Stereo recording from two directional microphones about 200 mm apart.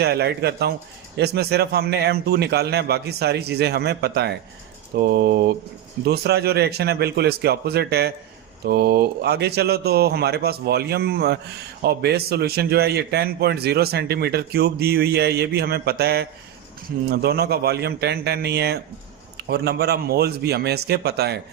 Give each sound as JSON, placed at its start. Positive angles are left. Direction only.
{"t": 0.0, "sound": "a man's voice", "side_deg": -55}